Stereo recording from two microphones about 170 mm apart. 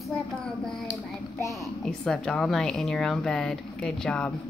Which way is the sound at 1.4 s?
20° left (ahead or behind).